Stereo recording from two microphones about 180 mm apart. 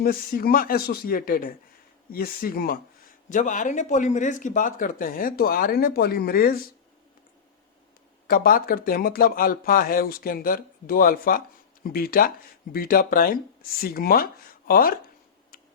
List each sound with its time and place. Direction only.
0.0 s speech: 55° left (ahead or behind)
3.2 s speech: 45° left (ahead or behind)
8.3 s speech: 55° left (ahead or behind)